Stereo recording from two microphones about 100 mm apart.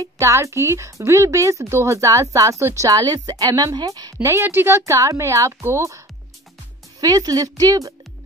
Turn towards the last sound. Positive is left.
turn(degrees=-35)  # may be behind; listen again after turning